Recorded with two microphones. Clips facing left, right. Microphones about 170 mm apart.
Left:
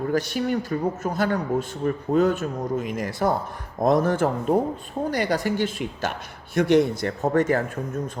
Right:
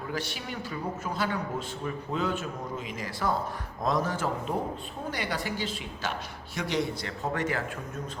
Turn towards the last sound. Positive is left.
turn(degrees=45)  # may be behind; listen again after turning